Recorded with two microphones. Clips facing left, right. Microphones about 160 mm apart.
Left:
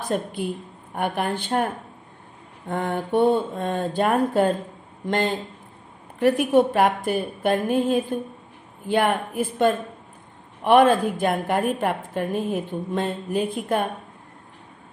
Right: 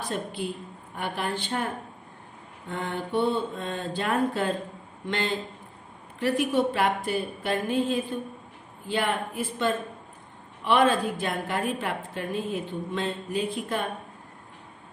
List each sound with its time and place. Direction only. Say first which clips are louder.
0.1 s a woman's voice: left 7 dB; 50° left (ahead or behind)
2.7 s a woman's voice: left 6 dB; 50° left (ahead or behind)